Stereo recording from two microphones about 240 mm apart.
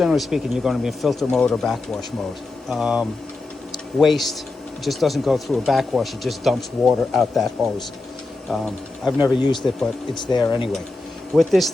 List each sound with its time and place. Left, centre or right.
0.0 s speech: centre
9.1 s speech: centre
11.3 s speech: centre